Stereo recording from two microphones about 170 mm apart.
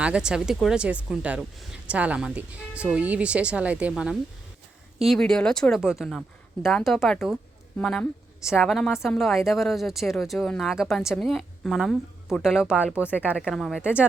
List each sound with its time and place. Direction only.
0.0 s a woman's voice: 5° right (ahead or behind)